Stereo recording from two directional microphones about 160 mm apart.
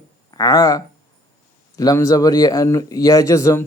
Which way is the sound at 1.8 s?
20° left (ahead or behind).